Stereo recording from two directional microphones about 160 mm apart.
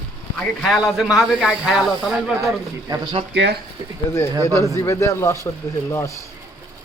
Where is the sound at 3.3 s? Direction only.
90° right.